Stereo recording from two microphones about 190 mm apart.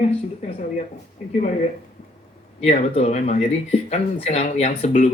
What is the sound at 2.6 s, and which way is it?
Speech, 35° left (ahead or behind).